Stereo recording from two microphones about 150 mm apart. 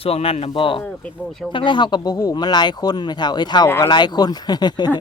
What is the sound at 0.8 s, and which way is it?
Speech, 10° left (ahead or behind).